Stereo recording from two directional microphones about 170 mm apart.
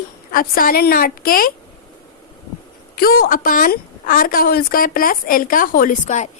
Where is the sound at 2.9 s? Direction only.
60° left (ahead or behind).